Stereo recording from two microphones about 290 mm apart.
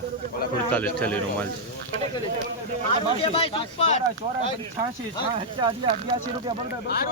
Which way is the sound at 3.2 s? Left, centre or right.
Centre.